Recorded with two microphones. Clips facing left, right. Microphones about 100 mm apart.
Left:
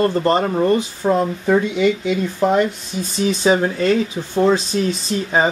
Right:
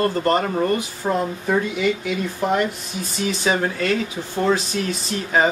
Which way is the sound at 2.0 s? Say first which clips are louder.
Left 5 dB; 20° left (ahead or behind).